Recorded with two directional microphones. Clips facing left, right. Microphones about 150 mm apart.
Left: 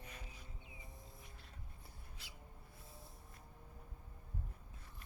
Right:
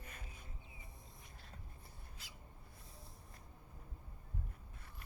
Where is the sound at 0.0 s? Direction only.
55° right (ahead or behind).